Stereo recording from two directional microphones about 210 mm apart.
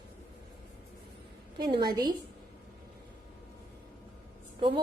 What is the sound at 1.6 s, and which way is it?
Speech, 20° right (ahead or behind).